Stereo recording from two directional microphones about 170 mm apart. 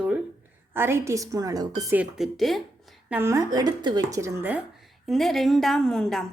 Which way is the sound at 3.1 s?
15° right (ahead or behind).